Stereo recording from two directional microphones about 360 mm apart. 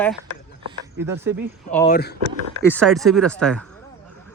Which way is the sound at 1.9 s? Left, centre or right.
Left.